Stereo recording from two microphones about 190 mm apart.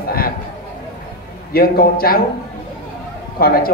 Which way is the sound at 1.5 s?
50° left (ahead or behind).